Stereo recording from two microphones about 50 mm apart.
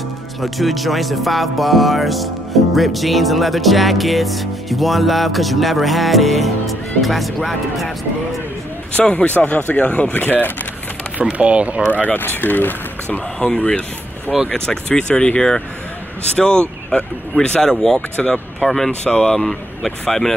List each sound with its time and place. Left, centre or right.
0.4 s speech: centre
8.9 s speech: left
10.1 s speech: left
11.1 s speech: right
11.9 s speech: left
13.6 s speech: left
18.1 s speech: left; by 20.3 s centre